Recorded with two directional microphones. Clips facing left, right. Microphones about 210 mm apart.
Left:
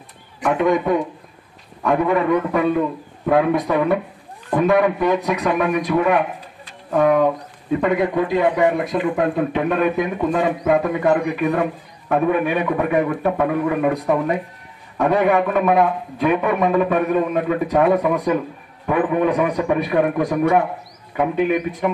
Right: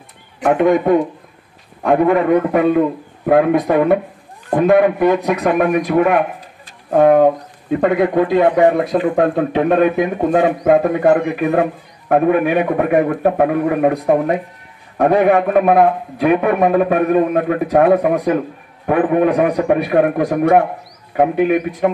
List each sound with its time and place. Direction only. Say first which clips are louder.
0.4 s a man's voice: right 5 dB; 55° right (ahead or behind)
8.6 s a man's voice: right 5 dB; 45° right (ahead or behind)